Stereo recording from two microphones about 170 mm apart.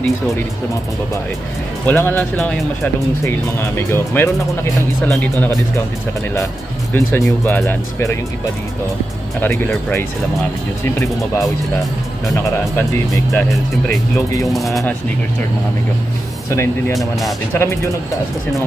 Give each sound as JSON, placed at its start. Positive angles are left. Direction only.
{"t": 1.9, "sound": "speech", "side_deg": 10}
{"t": 3.3, "sound": "speech", "side_deg": 15}
{"t": 6.9, "sound": "speech", "side_deg": 15}
{"t": 9.4, "sound": "speech", "side_deg": 10}
{"t": 12.7, "sound": "speech", "side_deg": 15}
{"t": 14.5, "sound": "speech", "side_deg": 0}
{"t": 16.4, "sound": "speech", "side_deg": 15}